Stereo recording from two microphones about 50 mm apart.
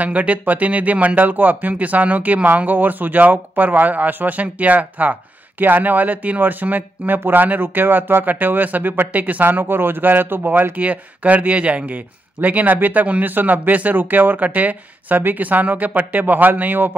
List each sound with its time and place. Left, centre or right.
0.0 s speech: right
9.5 s a man's voice: right
10.8 s speech: right